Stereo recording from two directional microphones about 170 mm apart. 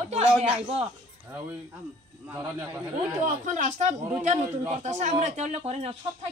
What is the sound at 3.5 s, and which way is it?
A woman's voice, 45° right (ahead or behind).